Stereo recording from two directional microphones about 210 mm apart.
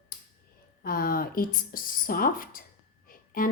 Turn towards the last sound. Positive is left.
turn(degrees=40)  # may be behind; listen again after turning